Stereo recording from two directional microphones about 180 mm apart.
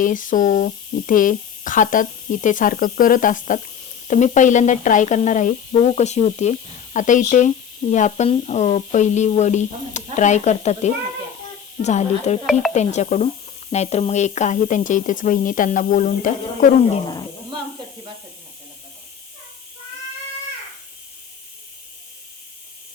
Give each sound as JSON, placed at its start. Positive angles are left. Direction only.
{"t": 0.0, "sound": "speech", "side_deg": 45}